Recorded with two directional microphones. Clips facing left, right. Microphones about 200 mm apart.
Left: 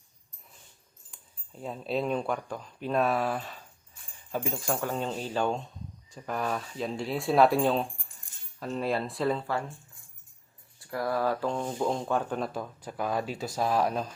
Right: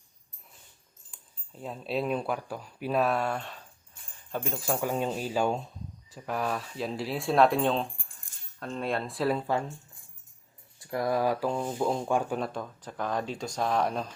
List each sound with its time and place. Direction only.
1.1 s speech: centre (ahead or behind)
9.5 s speech: 20° right (ahead or behind)
10.8 s speech: 20° right (ahead or behind)
12.4 s speech: 5° left (ahead or behind)